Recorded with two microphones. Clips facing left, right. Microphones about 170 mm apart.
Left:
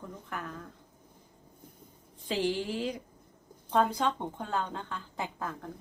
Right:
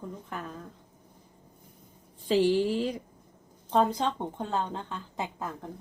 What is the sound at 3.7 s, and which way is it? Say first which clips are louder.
A woman's voice: right 2 dB; 25° right (ahead or behind).